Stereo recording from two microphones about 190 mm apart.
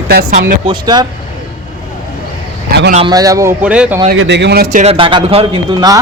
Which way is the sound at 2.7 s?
55° right (ahead or behind).